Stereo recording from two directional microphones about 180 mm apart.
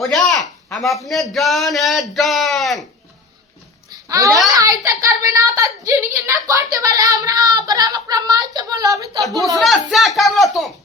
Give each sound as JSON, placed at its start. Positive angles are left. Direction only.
{"t": 0.7, "sound": "speech", "side_deg": 0}
{"t": 3.9, "sound": "babbling", "side_deg": -20}
{"t": 4.4, "sound": "a child's voice", "side_deg": -20}
{"t": 9.6, "sound": "speech", "side_deg": 0}